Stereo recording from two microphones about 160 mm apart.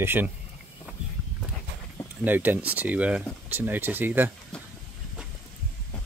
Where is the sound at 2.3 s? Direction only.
10° right (ahead or behind).